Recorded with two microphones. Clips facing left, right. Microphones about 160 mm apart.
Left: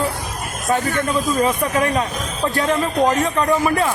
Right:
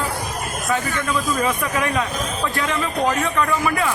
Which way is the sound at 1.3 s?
35° left (ahead or behind).